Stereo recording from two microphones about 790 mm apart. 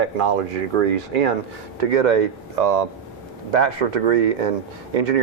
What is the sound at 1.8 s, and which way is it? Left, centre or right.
Speech, right.